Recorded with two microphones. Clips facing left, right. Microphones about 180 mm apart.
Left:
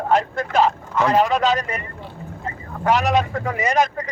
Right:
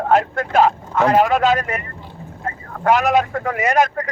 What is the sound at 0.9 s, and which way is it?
Speech, 45° right (ahead or behind).